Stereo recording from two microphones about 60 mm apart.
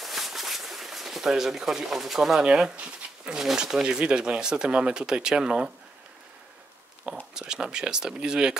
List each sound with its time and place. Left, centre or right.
0.0 s a sound: centre
2.4 s speech: centre
3.3 s speech: centre
7.3 s speech: centre